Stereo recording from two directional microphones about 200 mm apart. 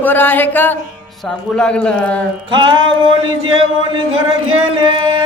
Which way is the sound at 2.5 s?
25° right (ahead or behind).